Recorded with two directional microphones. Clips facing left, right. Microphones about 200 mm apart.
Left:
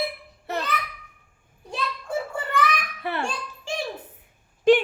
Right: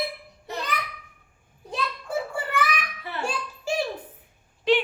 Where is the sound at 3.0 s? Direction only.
65° left (ahead or behind).